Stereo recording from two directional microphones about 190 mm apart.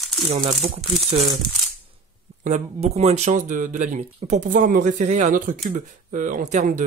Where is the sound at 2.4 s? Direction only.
35° right (ahead or behind).